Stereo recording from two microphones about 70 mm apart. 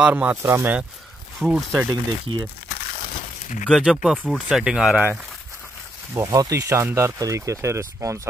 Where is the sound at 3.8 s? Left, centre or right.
Centre.